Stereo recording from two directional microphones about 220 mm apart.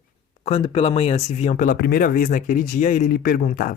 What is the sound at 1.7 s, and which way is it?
Speech, 45° left (ahead or behind).